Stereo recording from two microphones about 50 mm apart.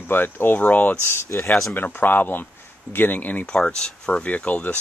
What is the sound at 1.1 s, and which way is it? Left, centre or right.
Speech, left.